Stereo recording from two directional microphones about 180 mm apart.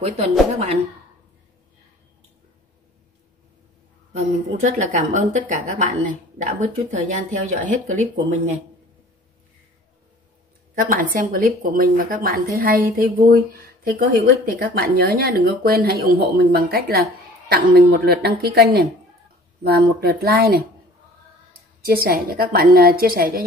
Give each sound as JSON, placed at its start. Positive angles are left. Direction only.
{"t": 0.0, "sound": "speech", "side_deg": -35}
{"t": 4.1, "sound": "a woman's voice", "side_deg": -40}
{"t": 10.7, "sound": "a woman's voice", "side_deg": -50}
{"t": 21.8, "sound": "a woman's voice", "side_deg": -55}